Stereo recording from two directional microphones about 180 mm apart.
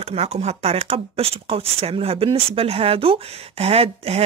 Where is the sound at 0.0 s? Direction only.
35° right (ahead or behind).